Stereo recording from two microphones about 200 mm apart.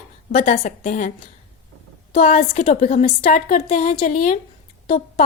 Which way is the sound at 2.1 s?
30° left (ahead or behind).